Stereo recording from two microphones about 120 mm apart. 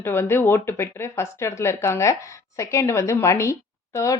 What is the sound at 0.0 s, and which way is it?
Speech, 20° left (ahead or behind).